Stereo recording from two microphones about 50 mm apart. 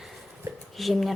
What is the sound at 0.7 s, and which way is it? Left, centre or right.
Speech, centre.